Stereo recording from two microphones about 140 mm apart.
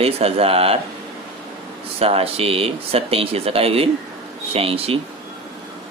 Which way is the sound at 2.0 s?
45° right (ahead or behind).